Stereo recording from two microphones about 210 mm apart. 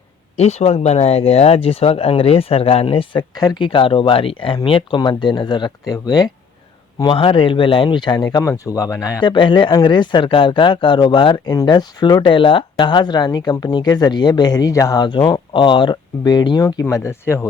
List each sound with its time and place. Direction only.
0.3 s speech: 30° left (ahead or behind); by 17.4 s 10° left (ahead or behind)